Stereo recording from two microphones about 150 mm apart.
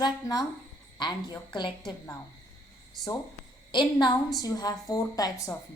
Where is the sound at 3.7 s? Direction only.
30° left (ahead or behind).